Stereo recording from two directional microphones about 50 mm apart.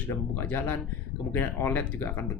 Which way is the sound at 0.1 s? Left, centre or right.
Left.